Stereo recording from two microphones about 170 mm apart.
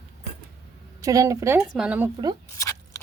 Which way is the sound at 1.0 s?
20° right (ahead or behind).